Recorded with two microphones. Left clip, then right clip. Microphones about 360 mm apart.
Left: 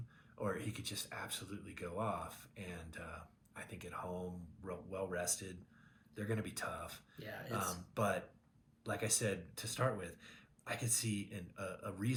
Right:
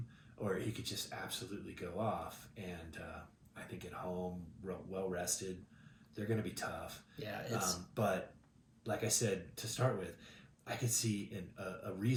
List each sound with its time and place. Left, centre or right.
0.4 s speech: centre
7.2 s speech: centre
7.5 s speech: centre